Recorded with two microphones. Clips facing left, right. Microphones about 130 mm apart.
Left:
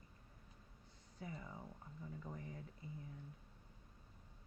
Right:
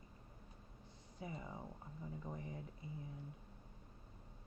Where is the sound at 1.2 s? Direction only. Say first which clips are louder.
Right 2 dB; 20° right (ahead or behind).